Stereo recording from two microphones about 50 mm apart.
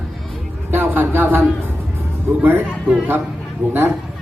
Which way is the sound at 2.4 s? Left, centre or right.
Right.